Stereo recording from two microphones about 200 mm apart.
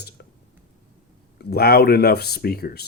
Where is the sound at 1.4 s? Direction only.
50° left (ahead or behind).